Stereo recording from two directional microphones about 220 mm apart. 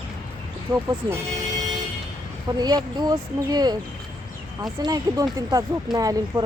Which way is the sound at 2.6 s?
20° right (ahead or behind).